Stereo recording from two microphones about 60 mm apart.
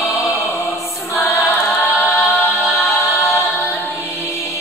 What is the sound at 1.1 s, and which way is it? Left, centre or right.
Choir, left.